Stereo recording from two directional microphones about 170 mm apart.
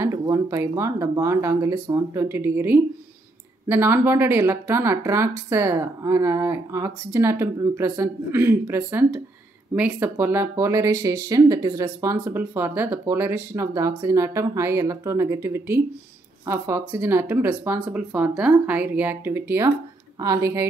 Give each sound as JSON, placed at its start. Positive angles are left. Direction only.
{"t": 0.0, "sound": "speech", "side_deg": -20}